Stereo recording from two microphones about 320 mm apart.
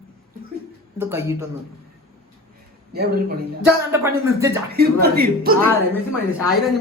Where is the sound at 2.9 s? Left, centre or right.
Right.